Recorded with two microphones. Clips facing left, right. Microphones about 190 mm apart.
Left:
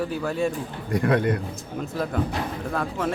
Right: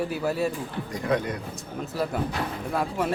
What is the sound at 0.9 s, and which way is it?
Speech, 60° left (ahead or behind).